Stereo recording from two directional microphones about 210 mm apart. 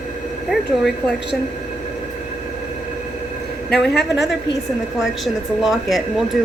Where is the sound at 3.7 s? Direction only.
50° left (ahead or behind).